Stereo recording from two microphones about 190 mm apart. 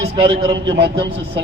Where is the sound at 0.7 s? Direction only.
60° right (ahead or behind).